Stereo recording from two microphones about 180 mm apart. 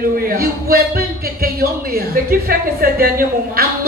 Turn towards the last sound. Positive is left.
turn(degrees=-55)  # may be behind; listen again after turning